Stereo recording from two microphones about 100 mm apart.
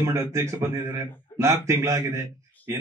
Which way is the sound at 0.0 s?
30° right (ahead or behind).